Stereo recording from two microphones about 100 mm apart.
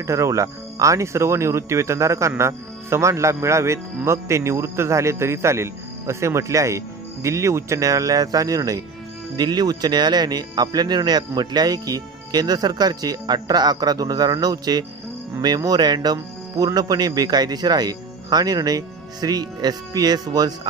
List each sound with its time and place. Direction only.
0.0 s speech: 30° right (ahead or behind)